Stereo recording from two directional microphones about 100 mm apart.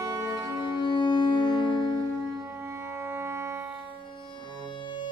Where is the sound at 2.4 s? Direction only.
30° right (ahead or behind).